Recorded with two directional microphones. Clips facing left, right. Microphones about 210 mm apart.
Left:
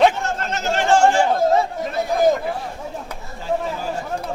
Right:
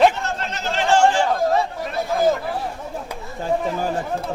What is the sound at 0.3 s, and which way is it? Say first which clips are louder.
Chatter: left 3 dB; 45° left (ahead or behind).